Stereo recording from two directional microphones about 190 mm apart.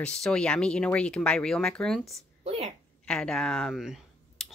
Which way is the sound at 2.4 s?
30° right (ahead or behind).